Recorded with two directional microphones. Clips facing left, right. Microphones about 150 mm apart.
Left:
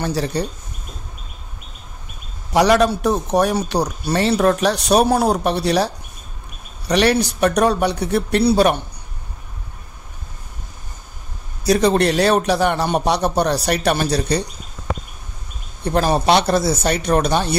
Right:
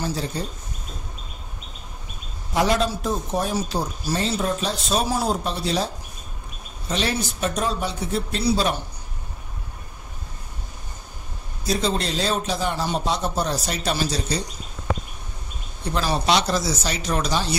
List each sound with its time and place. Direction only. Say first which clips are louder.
0.0 s a man's voice: left 6 dB; 70° left (ahead or behind)
2.5 s a man's voice: left 7 dB; 75° left (ahead or behind)
11.6 s a man's voice: left 9 dB; 70° left (ahead or behind)
15.8 s speech: left 7 dB; 50° left (ahead or behind)